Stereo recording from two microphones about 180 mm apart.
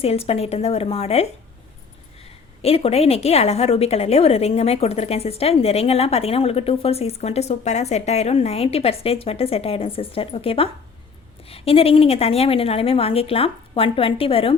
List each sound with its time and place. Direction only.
0.0 s a woman's voice: 35° left (ahead or behind)